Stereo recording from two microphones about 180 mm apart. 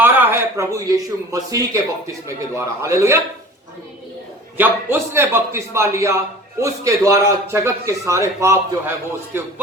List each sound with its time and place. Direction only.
0.0 s a man's voice: 15° right (ahead or behind)
4.5 s speech: 10° right (ahead or behind)